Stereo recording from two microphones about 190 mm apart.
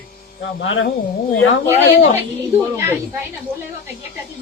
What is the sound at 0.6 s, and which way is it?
Speech, 75° left (ahead or behind).